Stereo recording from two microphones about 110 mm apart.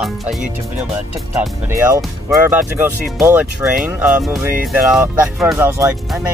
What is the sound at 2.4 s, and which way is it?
Speech, 20° right (ahead or behind).